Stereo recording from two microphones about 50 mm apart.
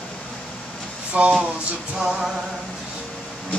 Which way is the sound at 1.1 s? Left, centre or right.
Right.